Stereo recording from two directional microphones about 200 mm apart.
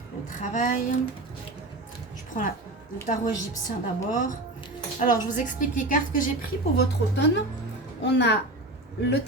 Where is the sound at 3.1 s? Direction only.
40° left (ahead or behind).